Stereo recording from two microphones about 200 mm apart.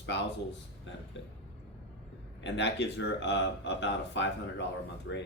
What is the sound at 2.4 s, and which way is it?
Speech, 60° left (ahead or behind).